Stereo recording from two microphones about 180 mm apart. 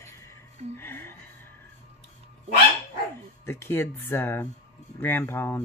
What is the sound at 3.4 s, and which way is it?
Speech, 15° left (ahead or behind).